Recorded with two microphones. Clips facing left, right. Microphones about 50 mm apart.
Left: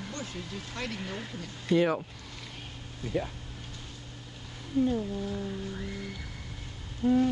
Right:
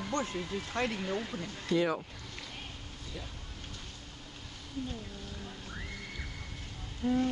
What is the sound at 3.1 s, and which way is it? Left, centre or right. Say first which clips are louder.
Speech: left 14 dB; left.